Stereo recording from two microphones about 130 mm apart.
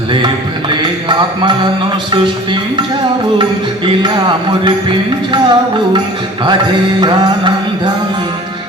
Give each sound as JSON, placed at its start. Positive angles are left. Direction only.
{"t": 0.7, "sound": "mantra", "side_deg": -35}
{"t": 2.1, "sound": "speech", "side_deg": -40}
{"t": 4.0, "sound": "speech", "side_deg": -35}
{"t": 7.0, "sound": "music", "side_deg": -35}